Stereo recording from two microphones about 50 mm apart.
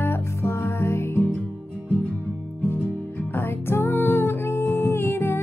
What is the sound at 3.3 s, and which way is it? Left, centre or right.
Music, left.